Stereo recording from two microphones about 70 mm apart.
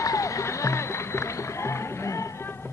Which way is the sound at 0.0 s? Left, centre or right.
Left.